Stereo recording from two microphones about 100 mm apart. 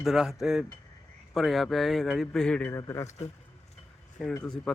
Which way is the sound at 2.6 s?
25° left (ahead or behind).